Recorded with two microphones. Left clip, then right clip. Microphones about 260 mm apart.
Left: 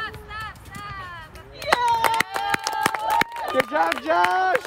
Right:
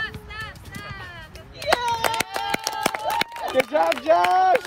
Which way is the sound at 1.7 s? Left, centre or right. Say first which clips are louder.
Left 2 dB; left.